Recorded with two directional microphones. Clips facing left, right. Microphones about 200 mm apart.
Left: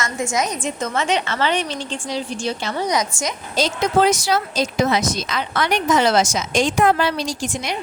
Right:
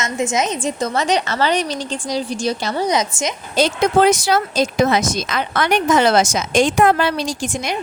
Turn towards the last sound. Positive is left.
turn(degrees=-50)  # may be behind; listen again after turning